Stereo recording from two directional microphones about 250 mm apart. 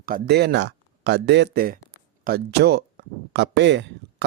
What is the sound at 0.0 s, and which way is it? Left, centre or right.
Speech, right.